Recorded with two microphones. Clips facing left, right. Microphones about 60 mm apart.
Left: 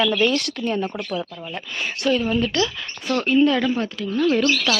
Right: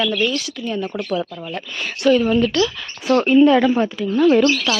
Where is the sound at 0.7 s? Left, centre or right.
Left.